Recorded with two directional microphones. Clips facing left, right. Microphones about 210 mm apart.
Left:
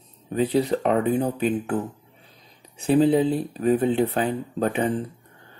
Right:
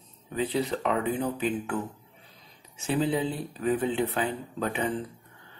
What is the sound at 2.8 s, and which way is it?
Speech, 50° left (ahead or behind).